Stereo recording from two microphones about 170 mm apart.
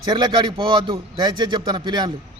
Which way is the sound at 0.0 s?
25° right (ahead or behind).